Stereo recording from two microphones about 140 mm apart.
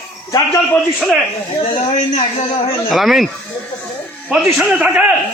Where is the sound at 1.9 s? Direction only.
50° left (ahead or behind).